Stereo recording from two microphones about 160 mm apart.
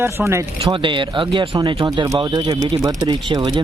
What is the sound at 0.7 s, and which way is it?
Speech, 30° right (ahead or behind).